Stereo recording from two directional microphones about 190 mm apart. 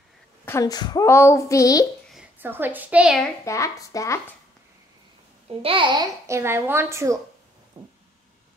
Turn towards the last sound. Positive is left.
turn(degrees=-25)  # may be behind; listen again after turning